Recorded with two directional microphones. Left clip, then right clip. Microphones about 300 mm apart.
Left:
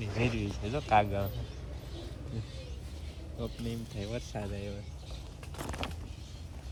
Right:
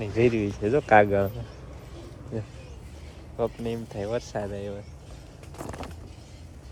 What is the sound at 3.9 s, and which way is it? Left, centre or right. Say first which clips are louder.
Speech: right 10 dB; centre.